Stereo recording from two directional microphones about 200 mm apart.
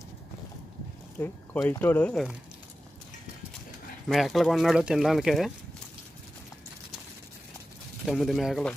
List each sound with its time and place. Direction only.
1.2 s speech: 10° left (ahead or behind)
4.1 s speech: centre (ahead or behind)
8.0 s speech: centre (ahead or behind)